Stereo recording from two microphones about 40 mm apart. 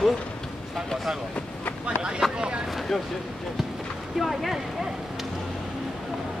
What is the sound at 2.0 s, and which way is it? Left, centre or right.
Vehicle, right.